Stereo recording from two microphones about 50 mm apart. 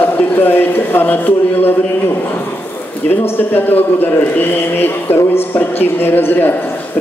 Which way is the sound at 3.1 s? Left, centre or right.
Left.